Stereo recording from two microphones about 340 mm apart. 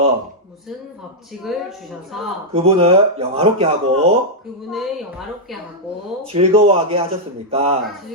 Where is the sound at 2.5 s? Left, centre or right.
Centre.